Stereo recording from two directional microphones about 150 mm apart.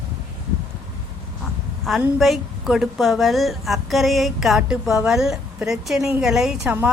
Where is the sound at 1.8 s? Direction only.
Centre (ahead or behind).